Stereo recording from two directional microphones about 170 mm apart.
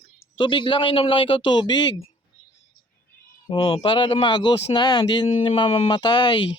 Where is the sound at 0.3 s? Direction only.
30° left (ahead or behind).